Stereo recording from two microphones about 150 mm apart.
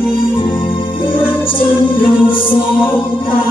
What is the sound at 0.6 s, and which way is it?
Music, 35° left (ahead or behind).